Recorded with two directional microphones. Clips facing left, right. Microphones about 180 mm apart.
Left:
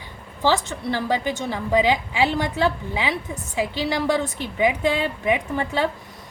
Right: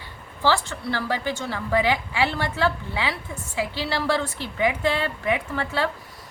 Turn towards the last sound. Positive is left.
turn(degrees=15)  # may be behind; listen again after turning